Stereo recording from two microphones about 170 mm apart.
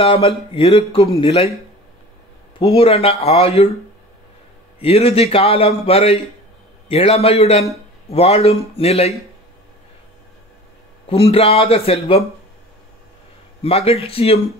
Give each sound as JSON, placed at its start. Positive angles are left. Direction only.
{"t": 0.0, "sound": "a man's voice", "side_deg": 35}
{"t": 2.6, "sound": "a man's voice", "side_deg": 35}
{"t": 4.7, "sound": "a man's voice", "side_deg": 35}
{"t": 11.1, "sound": "a man's voice", "side_deg": 35}
{"t": 13.6, "sound": "a man's voice", "side_deg": 35}